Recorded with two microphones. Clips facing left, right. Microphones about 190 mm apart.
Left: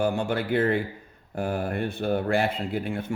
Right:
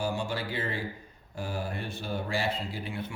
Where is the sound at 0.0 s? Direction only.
55° left (ahead or behind).